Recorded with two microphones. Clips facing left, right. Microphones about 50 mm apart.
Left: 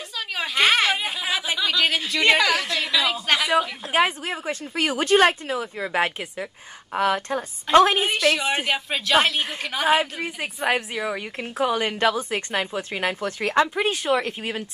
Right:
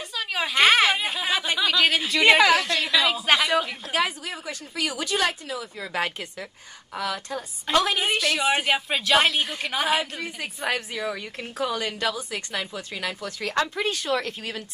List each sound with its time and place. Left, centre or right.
0.3 s a sound: centre
2.6 s a woman's voice: centre
3.9 s speech: left
5.9 s a woman's voice: left
7.0 s speech: left
8.0 s a woman's voice: centre
10.6 s a woman's voice: centre